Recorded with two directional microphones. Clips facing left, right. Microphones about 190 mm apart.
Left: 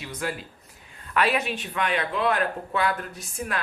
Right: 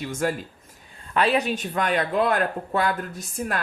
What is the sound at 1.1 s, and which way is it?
Speech, 35° right (ahead or behind).